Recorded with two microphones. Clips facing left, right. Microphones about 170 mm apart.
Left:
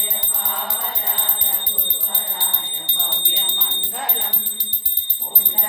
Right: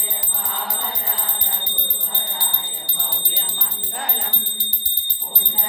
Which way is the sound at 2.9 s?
20° left (ahead or behind).